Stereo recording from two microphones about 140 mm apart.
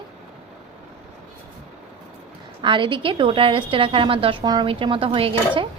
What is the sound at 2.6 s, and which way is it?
A woman's voice, 35° right (ahead or behind).